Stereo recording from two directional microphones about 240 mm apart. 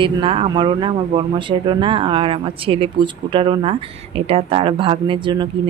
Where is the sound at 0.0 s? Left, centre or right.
Right.